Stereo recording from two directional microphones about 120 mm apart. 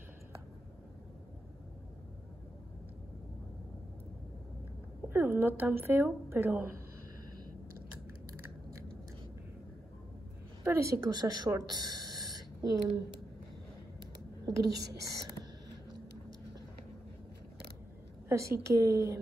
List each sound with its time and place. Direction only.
5.1 s speech: 15° right (ahead or behind)
10.6 s a woman's voice: 25° right (ahead or behind)
11.1 s speech: 35° right (ahead or behind)
14.4 s a woman's voice: 30° right (ahead or behind)
18.3 s a woman's voice: 25° right (ahead or behind)